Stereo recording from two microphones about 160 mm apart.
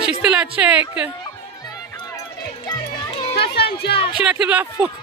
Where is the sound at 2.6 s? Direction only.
35° left (ahead or behind).